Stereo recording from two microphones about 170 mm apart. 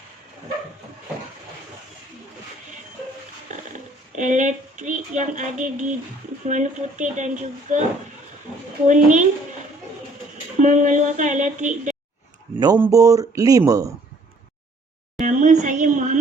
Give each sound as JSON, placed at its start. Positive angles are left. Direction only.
{"t": 4.1, "sound": "a sound", "side_deg": -45}
{"t": 6.5, "sound": "speech", "side_deg": -45}
{"t": 8.9, "sound": "speech", "side_deg": -45}
{"t": 10.6, "sound": "speech", "side_deg": -45}
{"t": 12.5, "sound": "speech", "side_deg": -20}
{"t": 15.2, "sound": "a sound", "side_deg": -45}